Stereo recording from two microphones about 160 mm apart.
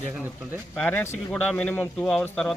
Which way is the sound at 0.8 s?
10° left (ahead or behind).